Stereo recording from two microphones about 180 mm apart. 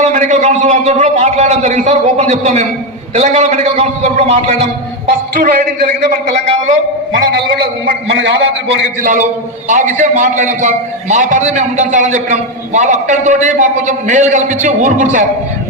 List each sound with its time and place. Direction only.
0.0 s a man's voice: 40° right (ahead or behind)
5.3 s a man's voice: 55° right (ahead or behind)
7.2 s a man's voice: 70° right (ahead or behind)
9.6 s a man's voice: 45° right (ahead or behind)